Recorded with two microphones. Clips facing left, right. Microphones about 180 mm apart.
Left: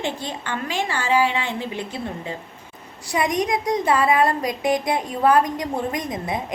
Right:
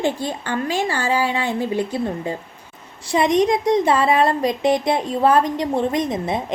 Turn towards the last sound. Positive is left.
turn(degrees=-25)  # may be behind; listen again after turning